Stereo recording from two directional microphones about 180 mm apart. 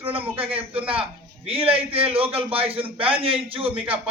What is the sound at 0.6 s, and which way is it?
Speech, 10° right (ahead or behind).